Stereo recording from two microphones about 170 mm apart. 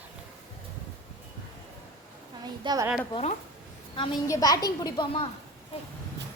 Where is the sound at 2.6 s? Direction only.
20° right (ahead or behind).